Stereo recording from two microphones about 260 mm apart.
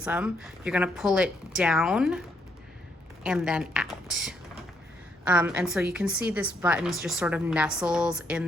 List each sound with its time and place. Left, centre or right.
0.0 s a woman's voice: centre
3.2 s a woman's voice: centre